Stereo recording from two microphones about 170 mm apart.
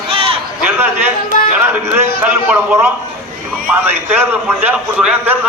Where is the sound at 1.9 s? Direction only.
10° right (ahead or behind).